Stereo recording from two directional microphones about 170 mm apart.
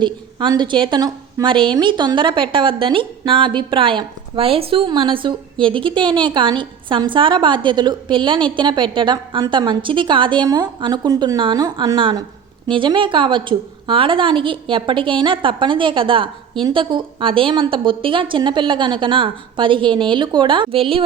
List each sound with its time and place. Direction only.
0.0 s a woman's voice: 25° right (ahead or behind)